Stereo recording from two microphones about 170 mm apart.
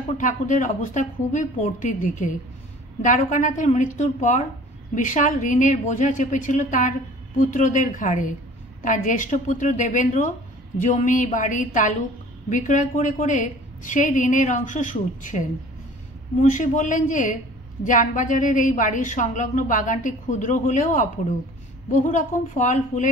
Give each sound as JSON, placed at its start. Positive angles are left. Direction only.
{"t": 0.2, "sound": "a woman's voice", "side_deg": 50}